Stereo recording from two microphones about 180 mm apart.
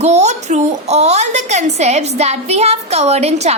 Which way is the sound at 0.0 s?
40° right (ahead or behind).